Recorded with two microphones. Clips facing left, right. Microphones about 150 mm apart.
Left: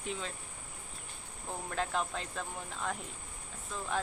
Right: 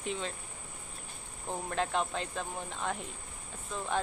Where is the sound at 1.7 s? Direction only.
Centre (ahead or behind).